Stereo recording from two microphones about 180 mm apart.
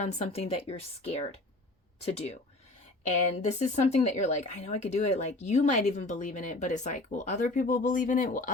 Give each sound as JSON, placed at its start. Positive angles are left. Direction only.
{"t": 0.0, "sound": "speech", "side_deg": 40}